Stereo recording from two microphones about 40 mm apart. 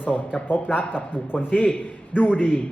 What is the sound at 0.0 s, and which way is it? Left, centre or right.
Speech, left.